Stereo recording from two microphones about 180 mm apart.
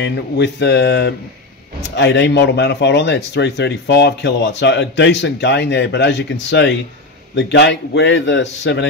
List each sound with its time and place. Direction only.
0.0 s speech: 75° left (ahead or behind)
7.3 s speech: 75° left (ahead or behind)